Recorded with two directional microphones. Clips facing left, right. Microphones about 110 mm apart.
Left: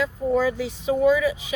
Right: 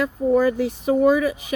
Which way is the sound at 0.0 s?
50° right (ahead or behind).